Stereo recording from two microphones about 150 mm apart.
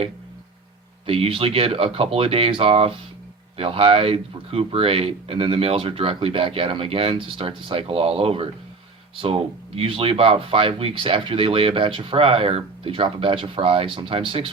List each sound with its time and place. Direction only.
1.0 s speech: 40° right (ahead or behind)